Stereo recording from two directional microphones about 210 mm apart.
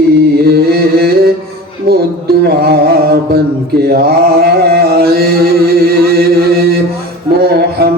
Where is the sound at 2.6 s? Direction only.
50° right (ahead or behind).